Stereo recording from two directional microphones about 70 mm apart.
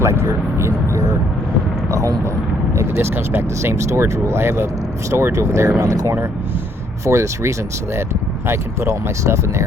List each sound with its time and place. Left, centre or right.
0.0 s speech: right
5.8 s speech: right
7.0 s speech: right